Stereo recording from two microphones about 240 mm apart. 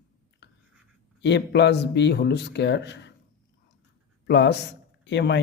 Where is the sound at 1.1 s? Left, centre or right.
Left.